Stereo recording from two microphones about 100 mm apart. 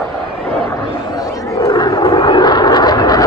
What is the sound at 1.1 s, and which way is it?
Vehicle, 35° left (ahead or behind).